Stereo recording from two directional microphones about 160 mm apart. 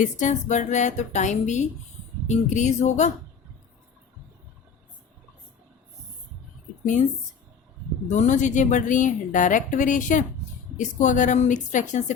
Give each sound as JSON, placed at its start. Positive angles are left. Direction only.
{"t": 0.0, "sound": "a woman's voice", "side_deg": 50}
{"t": 8.0, "sound": "a woman's voice", "side_deg": 50}